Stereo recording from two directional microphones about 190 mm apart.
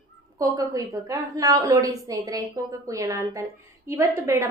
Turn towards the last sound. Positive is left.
turn(degrees=-15)  # may be behind; listen again after turning